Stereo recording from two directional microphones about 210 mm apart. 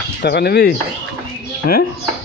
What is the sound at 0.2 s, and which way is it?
Speech, 50° left (ahead or behind).